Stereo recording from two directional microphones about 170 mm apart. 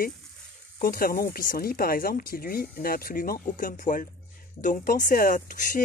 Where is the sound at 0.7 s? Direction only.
60° left (ahead or behind).